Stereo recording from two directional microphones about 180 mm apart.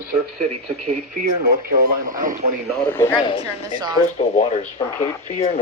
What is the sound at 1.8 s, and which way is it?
Speech, 50° right (ahead or behind).